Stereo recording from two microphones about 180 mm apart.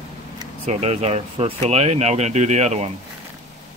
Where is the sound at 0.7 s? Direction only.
40° right (ahead or behind).